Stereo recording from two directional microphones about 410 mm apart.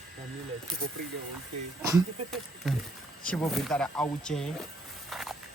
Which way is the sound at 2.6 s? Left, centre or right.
Centre.